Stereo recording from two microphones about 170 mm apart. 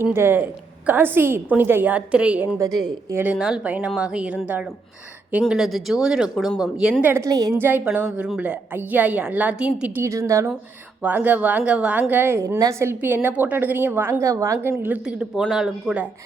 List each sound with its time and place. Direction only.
0.0 s a woman's voice: 15° right (ahead or behind)
2.6 s a woman's voice: 20° right (ahead or behind)
3.3 s a woman's voice: 5° right (ahead or behind)